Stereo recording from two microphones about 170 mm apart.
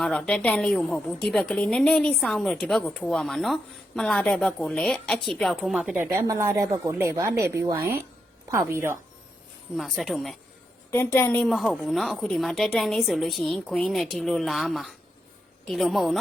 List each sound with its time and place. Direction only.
0.0 s a woman's voice: centre (ahead or behind)
6.1 s a woman's voice: 20° right (ahead or behind)
9.7 s a woman's voice: centre (ahead or behind)
10.9 s a woman's voice: 10° left (ahead or behind)
11.4 s a woman's voice: centre (ahead or behind)